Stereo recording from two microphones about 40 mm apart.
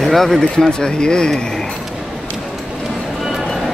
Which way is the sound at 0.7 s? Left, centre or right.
Left.